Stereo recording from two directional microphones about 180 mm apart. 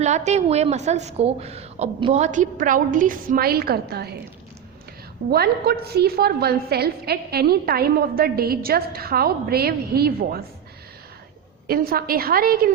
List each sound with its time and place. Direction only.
0.0 s a woman's voice: 40° right (ahead or behind); by 4.1 s 60° right (ahead or behind)
5.3 s a woman's voice: 60° right (ahead or behind)
11.7 s a woman's voice: 55° right (ahead or behind)